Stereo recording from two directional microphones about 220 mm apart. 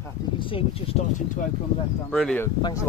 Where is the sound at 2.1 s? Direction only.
Centre (ahead or behind).